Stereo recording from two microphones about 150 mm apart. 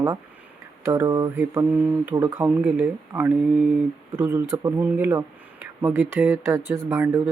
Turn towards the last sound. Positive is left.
turn(degrees=-15)  # may be behind; listen again after turning